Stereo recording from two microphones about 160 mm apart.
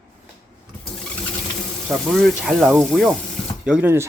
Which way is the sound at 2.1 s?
Centre (ahead or behind).